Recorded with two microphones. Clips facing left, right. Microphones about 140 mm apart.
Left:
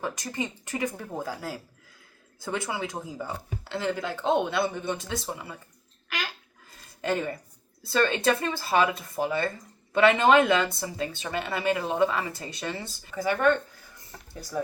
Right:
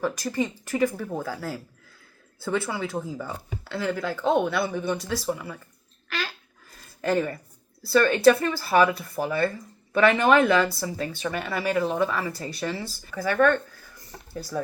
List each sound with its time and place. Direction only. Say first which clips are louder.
0.0 s speech: right 5 dB; 20° left (ahead or behind)
7.0 s speech: right 4 dB; 20° left (ahead or behind)